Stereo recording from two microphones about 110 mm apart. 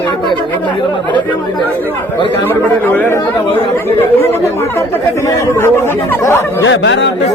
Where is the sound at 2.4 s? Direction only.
15° left (ahead or behind).